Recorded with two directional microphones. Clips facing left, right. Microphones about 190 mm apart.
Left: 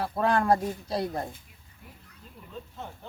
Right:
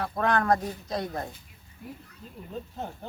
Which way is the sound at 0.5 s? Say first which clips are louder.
Left 1 dB; 30° left (ahead or behind).